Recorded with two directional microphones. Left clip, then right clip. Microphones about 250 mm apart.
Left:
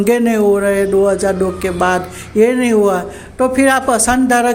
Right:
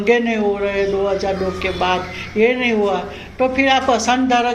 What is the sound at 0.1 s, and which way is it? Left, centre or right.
A man's voice, left.